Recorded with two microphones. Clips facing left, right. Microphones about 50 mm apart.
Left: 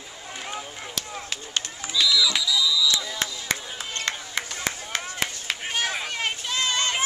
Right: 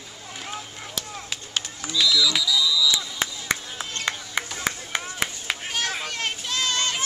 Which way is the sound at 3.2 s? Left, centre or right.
Centre.